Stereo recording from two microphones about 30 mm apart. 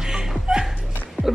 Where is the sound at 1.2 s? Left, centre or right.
Left.